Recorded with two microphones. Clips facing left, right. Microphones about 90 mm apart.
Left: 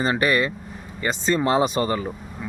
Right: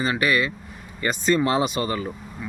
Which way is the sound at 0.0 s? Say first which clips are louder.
Left 1 dB; 35° left (ahead or behind).